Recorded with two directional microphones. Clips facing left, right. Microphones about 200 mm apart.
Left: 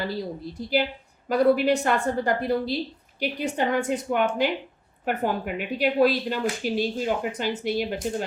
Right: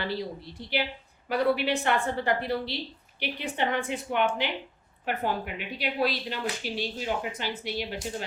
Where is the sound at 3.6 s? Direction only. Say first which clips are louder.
Left 4 dB; 45° left (ahead or behind).